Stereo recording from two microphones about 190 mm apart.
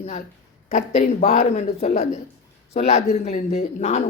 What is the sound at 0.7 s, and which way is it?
A woman's voice, 35° left (ahead or behind).